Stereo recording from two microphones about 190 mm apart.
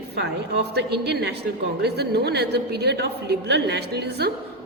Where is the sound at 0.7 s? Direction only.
60° right (ahead or behind).